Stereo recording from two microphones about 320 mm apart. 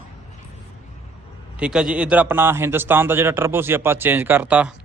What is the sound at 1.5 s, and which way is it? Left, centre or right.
A man's voice, centre.